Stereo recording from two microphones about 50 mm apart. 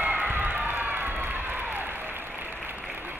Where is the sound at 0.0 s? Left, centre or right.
Right.